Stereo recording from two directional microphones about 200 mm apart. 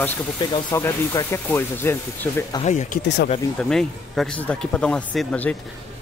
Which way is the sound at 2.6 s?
35° left (ahead or behind).